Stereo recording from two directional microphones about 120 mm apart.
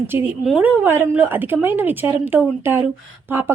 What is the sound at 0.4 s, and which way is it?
Speech, 10° right (ahead or behind).